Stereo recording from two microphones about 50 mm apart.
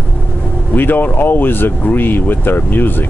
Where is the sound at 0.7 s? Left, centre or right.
Left.